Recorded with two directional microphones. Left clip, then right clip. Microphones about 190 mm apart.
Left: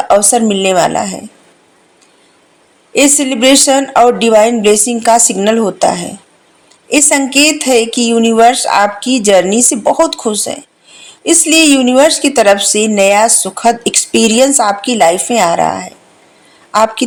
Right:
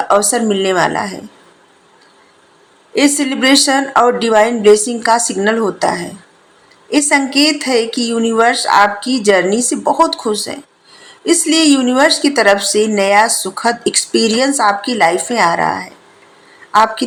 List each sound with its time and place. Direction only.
0.1 s a woman's voice: 40° left (ahead or behind)
2.9 s a woman's voice: 40° left (ahead or behind)